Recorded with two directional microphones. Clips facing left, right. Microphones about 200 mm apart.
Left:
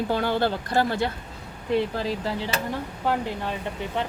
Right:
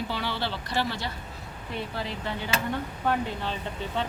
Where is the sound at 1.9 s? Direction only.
35° left (ahead or behind).